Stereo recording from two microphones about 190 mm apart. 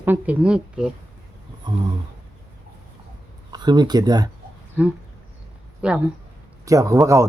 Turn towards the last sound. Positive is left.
turn(degrees=-15)  # may be behind; listen again after turning